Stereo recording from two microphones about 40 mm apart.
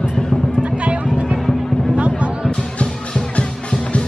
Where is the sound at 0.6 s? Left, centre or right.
Right.